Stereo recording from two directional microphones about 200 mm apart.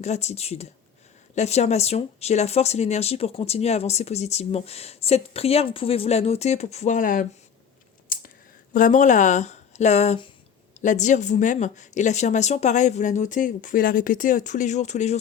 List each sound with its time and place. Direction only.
0.0 s speech: 35° left (ahead or behind)
8.1 s a sound: 45° left (ahead or behind)
8.7 s speech: 40° left (ahead or behind)